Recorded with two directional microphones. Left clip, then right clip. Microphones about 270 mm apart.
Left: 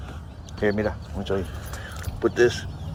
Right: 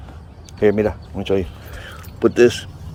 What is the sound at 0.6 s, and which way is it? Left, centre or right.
Speech, right.